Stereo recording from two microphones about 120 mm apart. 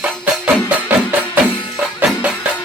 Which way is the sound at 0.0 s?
10° right (ahead or behind).